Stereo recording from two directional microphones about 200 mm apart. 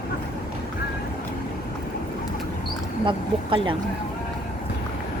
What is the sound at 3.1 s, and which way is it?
Speech, 25° right (ahead or behind).